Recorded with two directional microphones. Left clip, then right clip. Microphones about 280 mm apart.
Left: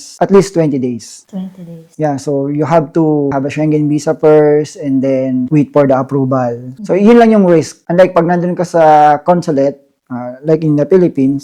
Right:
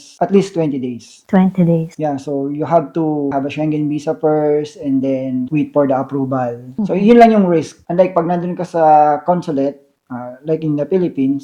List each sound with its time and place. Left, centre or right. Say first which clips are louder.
0.2 s speech: left 5 dB; left